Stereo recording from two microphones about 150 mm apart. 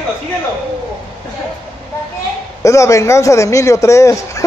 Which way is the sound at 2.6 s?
20° left (ahead or behind).